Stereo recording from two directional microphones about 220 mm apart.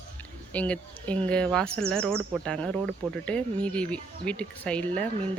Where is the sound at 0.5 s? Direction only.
5° left (ahead or behind).